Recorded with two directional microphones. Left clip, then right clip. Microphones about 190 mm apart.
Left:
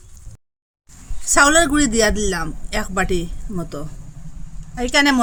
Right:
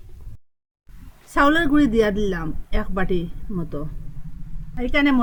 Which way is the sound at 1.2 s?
20° left (ahead or behind).